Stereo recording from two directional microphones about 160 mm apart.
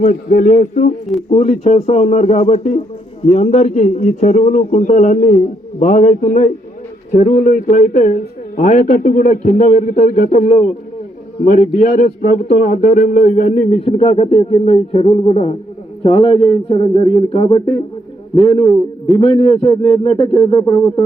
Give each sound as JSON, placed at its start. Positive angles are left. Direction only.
{"t": 0.0, "sound": "a man's voice", "side_deg": 55}